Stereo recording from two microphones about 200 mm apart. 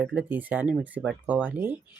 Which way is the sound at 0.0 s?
5° right (ahead or behind).